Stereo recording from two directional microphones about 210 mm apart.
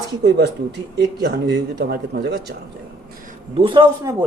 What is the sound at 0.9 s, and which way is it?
Speech, 50° right (ahead or behind).